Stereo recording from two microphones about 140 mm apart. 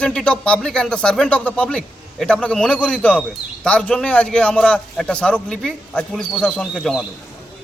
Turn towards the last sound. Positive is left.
turn(degrees=0)  # may be behind; listen again after turning